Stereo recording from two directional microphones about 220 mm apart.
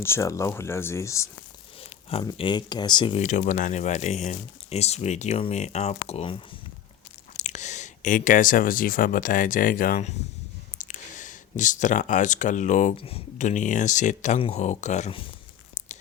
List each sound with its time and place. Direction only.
0.0 s speech: 10° left (ahead or behind)
1.8 s speech: 25° left (ahead or behind)